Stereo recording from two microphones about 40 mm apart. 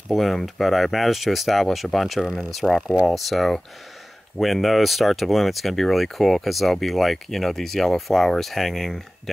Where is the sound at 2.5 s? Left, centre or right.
Centre.